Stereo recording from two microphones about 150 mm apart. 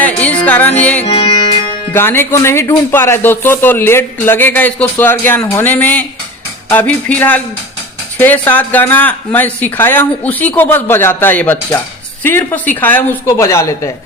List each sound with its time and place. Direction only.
0.0 s music: 10° left (ahead or behind)
1.0 s music: 35° left (ahead or behind)
1.9 s speech: 15° left (ahead or behind)